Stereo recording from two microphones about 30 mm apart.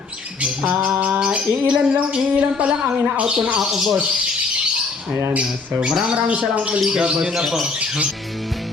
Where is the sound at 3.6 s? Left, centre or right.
Centre.